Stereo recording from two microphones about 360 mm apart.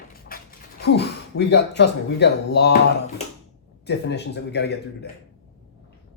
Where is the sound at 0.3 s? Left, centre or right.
Left.